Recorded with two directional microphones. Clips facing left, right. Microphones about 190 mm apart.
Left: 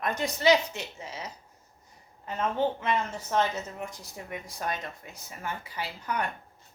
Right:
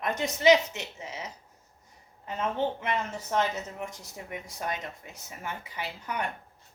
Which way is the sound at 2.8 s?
20° right (ahead or behind).